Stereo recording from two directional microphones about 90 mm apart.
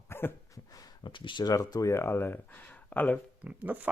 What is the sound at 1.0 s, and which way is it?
Speech, 65° left (ahead or behind).